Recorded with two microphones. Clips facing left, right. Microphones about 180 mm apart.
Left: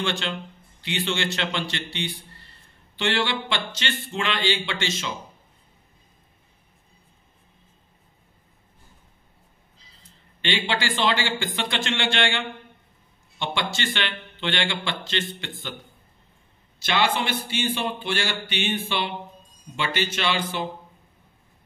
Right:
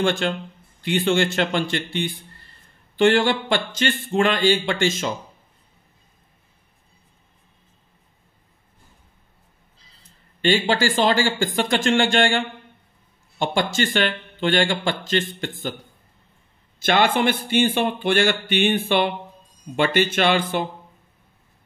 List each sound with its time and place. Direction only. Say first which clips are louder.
0.0 s speech: right 6 dB; 50° right (ahead or behind)
10.4 s speech: right 7 dB; 45° right (ahead or behind)
16.8 s speech: right 5 dB; 50° right (ahead or behind)